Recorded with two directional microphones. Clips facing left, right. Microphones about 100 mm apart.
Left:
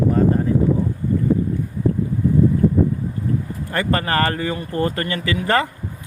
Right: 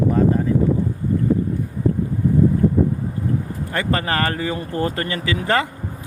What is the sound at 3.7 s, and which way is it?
Speech, 15° right (ahead or behind).